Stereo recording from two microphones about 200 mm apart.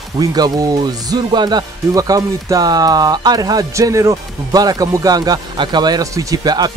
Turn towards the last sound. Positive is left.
turn(degrees=-20)  # may be behind; listen again after turning